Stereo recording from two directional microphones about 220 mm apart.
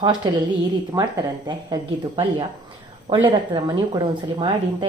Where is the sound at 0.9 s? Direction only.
15° right (ahead or behind).